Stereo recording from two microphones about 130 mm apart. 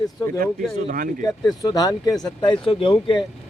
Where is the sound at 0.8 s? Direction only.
90° right.